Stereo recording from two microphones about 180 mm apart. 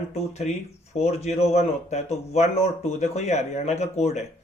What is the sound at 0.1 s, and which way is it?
A man's voice, 35° left (ahead or behind).